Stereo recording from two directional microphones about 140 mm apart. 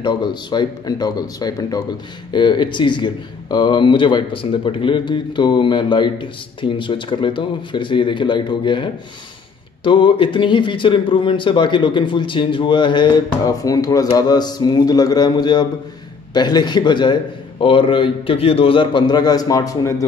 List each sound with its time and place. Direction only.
0.0 s speech: 35° left (ahead or behind)